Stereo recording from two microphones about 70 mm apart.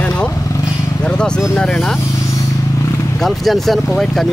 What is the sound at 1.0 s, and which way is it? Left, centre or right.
Speech, centre.